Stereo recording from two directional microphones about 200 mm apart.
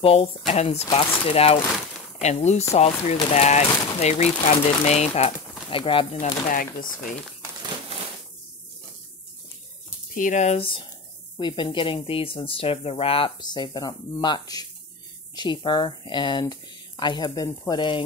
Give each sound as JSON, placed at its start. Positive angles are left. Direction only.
{"t": 0.0, "sound": "speech", "side_deg": 30}
{"t": 10.1, "sound": "speech", "side_deg": 40}